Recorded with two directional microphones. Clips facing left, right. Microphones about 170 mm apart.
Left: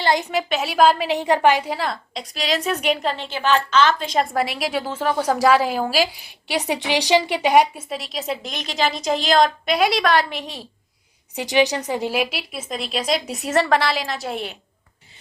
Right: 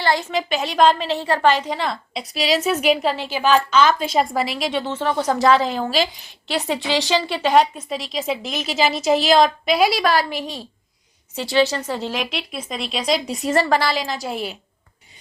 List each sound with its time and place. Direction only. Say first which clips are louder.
0.0 s a woman's voice: left 1 dB; 20° left (ahead or behind)
0.3 s a woman's voice: even; centre (ahead or behind)
7.9 s a woman's voice: right 2 dB; centre (ahead or behind)
11.3 s a woman's voice: even; 15° left (ahead or behind); by 14.6 s centre (ahead or behind)